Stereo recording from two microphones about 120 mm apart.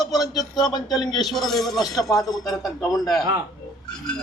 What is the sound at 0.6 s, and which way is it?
Speech, 35° left (ahead or behind).